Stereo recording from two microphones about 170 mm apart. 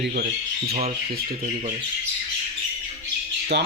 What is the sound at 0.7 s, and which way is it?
Speech, 35° right (ahead or behind).